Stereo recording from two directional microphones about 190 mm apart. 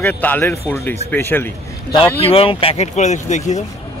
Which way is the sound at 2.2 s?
30° left (ahead or behind).